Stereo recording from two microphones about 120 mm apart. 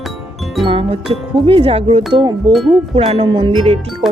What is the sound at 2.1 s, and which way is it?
Speech, 40° right (ahead or behind).